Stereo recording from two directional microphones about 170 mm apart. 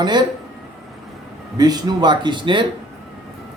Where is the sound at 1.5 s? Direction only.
25° right (ahead or behind).